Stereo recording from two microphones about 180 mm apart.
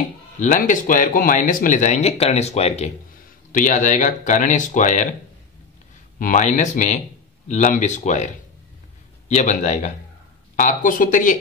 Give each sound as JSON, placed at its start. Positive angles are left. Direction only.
{"t": 0.4, "sound": "speech", "side_deg": 45}
{"t": 6.1, "sound": "speech", "side_deg": 45}